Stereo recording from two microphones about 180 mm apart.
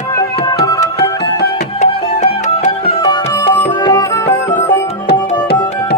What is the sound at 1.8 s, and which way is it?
Music, 40° left (ahead or behind).